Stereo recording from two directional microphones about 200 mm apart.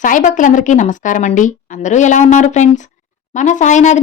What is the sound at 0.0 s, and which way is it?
Speech, 40° left (ahead or behind).